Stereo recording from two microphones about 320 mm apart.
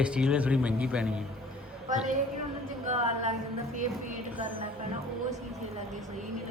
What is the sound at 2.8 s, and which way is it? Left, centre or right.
Speech, right.